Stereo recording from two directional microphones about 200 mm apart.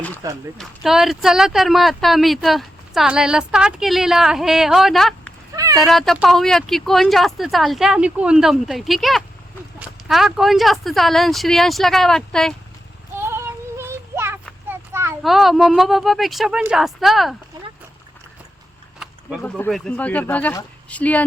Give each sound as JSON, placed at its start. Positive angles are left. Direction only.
{"t": 0.2, "sound": "speech", "side_deg": -15}
{"t": 0.6, "sound": "speech", "side_deg": 0}
{"t": 13.7, "sound": "child singing", "side_deg": -10}
{"t": 15.2, "sound": "speech", "side_deg": 0}
{"t": 19.4, "sound": "speech", "side_deg": 10}